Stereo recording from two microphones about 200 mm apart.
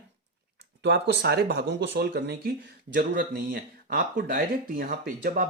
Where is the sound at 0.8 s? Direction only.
60° right (ahead or behind).